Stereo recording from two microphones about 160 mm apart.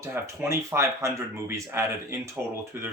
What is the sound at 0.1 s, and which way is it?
Speech, 15° right (ahead or behind).